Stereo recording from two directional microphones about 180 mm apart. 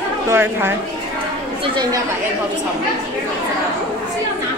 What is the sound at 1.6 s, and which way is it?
Chatter, 25° right (ahead or behind).